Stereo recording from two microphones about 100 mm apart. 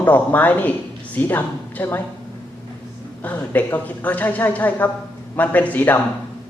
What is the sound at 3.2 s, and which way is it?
Speech, 15° left (ahead or behind).